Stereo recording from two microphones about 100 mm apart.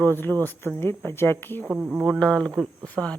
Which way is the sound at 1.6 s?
20° right (ahead or behind).